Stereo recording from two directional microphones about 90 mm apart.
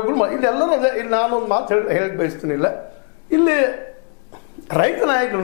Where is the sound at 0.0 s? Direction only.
20° left (ahead or behind).